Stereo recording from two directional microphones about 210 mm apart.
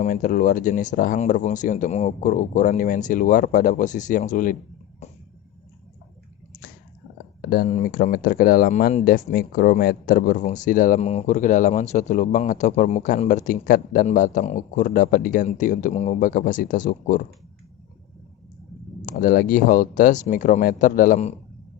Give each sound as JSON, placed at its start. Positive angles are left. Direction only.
{"t": 0.0, "sound": "speech", "side_deg": 40}
{"t": 7.4, "sound": "speech", "side_deg": 50}
{"t": 19.0, "sound": "speech", "side_deg": 40}